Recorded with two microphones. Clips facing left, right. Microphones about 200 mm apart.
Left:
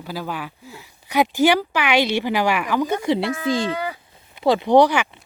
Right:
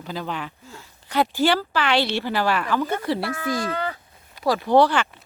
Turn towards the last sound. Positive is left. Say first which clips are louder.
# left 3 dB
turn(degrees=15)  # may be behind; listen again after turning